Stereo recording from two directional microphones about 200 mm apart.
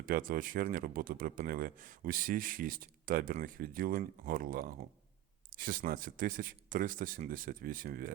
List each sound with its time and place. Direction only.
0.0 s speech: 45° right (ahead or behind)